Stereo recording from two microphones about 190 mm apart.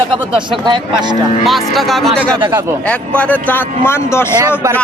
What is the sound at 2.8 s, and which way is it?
A man's voice, 5° left (ahead or behind).